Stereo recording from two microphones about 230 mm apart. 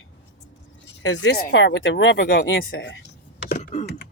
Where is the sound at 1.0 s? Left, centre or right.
Left.